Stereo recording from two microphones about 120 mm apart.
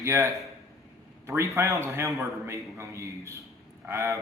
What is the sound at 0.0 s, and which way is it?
Speech, 25° right (ahead or behind).